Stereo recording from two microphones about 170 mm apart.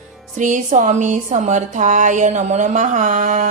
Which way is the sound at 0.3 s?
45° right (ahead or behind).